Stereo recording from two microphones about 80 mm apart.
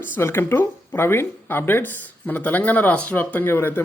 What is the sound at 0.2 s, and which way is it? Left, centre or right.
Speech, left.